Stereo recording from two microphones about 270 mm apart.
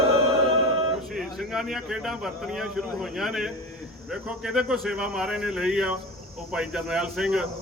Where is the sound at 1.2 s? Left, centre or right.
Centre.